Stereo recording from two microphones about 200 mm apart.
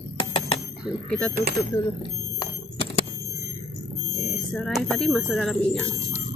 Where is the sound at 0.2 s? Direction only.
25° left (ahead or behind).